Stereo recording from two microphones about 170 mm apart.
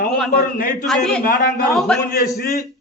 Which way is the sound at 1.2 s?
60° left (ahead or behind).